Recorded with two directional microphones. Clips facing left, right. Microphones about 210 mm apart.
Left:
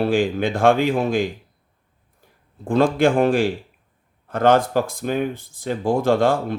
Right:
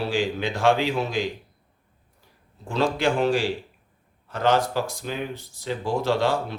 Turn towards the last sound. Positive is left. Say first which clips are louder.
# left 5 dB
turn(degrees=50)  # may be behind; listen again after turning